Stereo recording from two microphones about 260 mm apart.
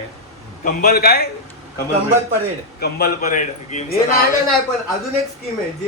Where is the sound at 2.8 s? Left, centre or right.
Left.